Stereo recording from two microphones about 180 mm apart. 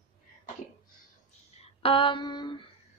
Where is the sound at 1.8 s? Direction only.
30° left (ahead or behind).